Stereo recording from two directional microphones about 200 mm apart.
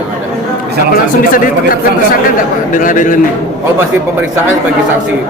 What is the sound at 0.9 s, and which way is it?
A man's voice, 45° left (ahead or behind).